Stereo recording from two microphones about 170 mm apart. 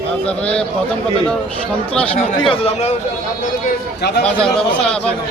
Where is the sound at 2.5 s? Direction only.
35° left (ahead or behind).